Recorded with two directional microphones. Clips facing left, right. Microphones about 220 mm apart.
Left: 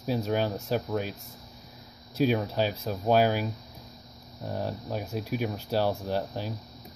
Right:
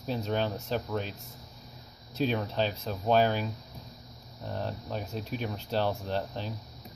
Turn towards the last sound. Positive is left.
turn(degrees=10)  # may be behind; listen again after turning